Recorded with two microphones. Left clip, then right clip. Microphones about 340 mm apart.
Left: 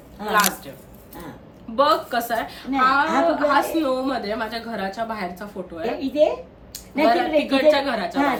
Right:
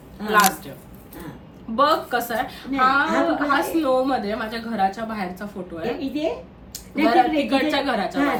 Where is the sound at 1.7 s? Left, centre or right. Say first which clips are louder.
Even; centre.